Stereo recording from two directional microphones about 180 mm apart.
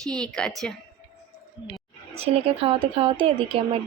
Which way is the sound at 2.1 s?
35° right (ahead or behind).